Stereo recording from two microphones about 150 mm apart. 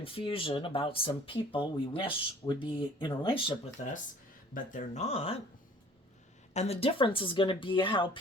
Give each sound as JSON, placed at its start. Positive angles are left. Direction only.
{"t": 0.0, "sound": "speech", "side_deg": 35}
{"t": 4.5, "sound": "speech", "side_deg": 55}
{"t": 6.5, "sound": "speech", "side_deg": 45}